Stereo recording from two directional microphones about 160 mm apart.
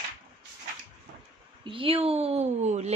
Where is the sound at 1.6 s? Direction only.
35° right (ahead or behind).